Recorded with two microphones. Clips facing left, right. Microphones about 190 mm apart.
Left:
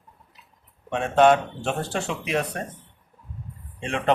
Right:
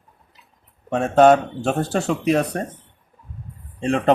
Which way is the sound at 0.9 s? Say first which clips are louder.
Right 4 dB; 40° right (ahead or behind).